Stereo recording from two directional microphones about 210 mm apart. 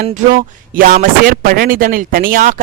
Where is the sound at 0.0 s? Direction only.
45° right (ahead or behind).